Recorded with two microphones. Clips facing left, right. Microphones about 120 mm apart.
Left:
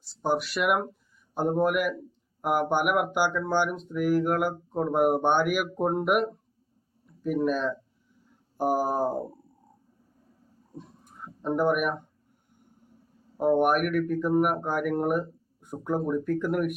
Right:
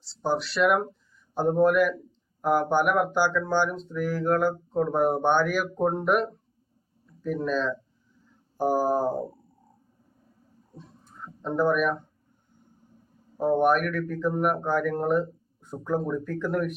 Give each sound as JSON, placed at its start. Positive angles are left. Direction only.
{"t": 0.2, "sound": "speech", "side_deg": 10}
{"t": 11.0, "sound": "a sound", "side_deg": 15}
{"t": 13.4, "sound": "speech", "side_deg": 15}